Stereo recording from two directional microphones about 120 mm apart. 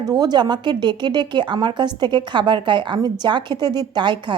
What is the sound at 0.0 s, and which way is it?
Speech, 35° right (ahead or behind).